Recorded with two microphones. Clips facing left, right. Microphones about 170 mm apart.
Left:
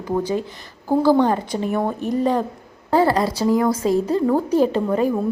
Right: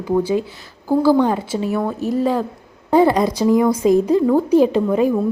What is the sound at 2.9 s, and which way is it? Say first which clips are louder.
A woman's voice: right 3 dB; 15° right (ahead or behind).